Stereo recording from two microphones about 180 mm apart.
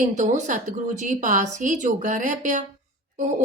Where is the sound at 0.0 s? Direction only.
45° right (ahead or behind).